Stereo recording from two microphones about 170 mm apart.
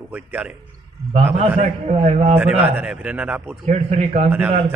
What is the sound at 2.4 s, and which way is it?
A man's voice, 10° right (ahead or behind).